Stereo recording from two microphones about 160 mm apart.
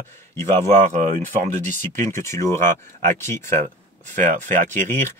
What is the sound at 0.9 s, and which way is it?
Speech, 50° right (ahead or behind).